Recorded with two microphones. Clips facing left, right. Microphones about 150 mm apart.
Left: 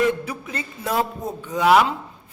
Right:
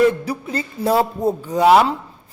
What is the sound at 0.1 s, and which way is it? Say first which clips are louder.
A woman's voice: right 3 dB; 35° right (ahead or behind).